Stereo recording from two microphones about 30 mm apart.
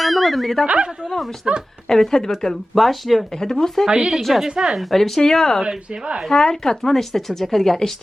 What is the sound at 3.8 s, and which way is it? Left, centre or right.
Speech, right.